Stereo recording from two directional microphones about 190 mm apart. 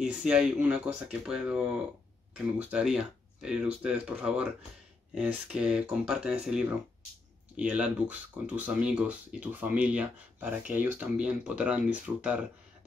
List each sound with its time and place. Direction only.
0.0 s speech: 5° right (ahead or behind)